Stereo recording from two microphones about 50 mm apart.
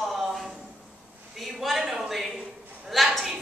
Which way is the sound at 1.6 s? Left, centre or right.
Centre.